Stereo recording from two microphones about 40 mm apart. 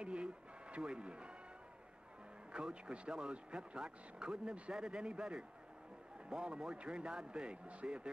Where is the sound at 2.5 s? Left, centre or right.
Right.